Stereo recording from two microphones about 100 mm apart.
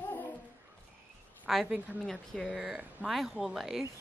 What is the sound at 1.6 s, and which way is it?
Speech, 15° right (ahead or behind).